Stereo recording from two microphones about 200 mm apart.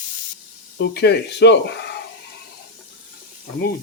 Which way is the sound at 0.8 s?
55° left (ahead or behind).